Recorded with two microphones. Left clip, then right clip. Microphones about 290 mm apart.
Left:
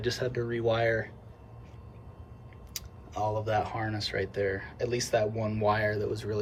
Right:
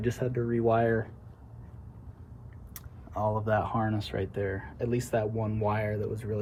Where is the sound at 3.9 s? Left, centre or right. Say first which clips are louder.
Left 1 dB; centre.